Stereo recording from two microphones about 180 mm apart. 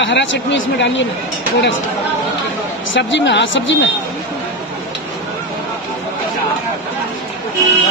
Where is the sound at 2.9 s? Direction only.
90° left.